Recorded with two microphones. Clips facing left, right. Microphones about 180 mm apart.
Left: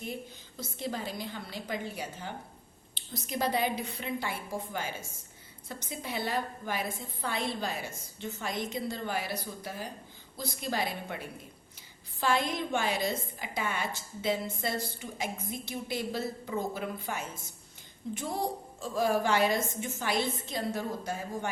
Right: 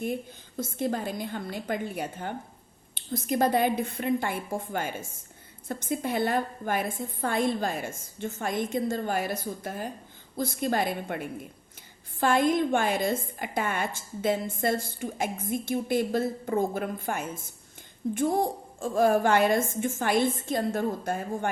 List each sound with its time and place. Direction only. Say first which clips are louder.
0.0 s a woman's voice: right 8 dB; 55° right (ahead or behind)